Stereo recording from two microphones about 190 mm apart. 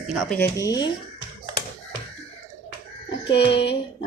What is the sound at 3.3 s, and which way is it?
Speech, 65° left (ahead or behind).